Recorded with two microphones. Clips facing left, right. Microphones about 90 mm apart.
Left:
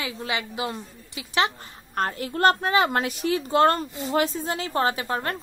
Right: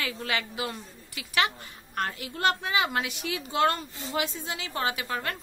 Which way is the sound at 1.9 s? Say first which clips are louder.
Left 6 dB; 40° left (ahead or behind).